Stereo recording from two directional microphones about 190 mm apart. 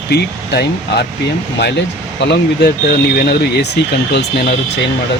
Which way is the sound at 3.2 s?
60° left (ahead or behind).